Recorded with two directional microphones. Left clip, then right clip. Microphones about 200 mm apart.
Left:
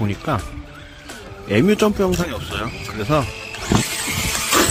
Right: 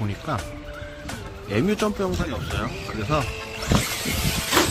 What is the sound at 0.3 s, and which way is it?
Speech, 35° left (ahead or behind).